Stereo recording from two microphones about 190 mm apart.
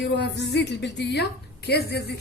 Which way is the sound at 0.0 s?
65° left (ahead or behind).